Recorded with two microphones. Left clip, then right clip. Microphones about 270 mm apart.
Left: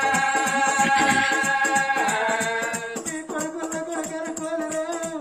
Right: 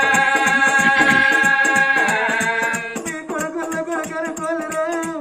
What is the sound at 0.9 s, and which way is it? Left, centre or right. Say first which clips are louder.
Music: right 5 dB; centre.